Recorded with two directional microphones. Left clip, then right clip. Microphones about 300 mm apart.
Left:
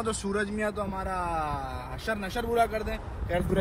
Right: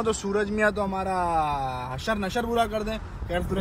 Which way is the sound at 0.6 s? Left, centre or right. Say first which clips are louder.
Right 7 dB; right.